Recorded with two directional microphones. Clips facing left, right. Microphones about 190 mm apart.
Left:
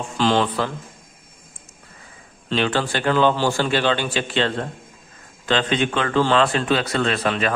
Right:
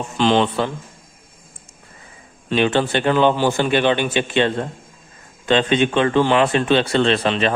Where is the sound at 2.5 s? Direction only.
20° right (ahead or behind).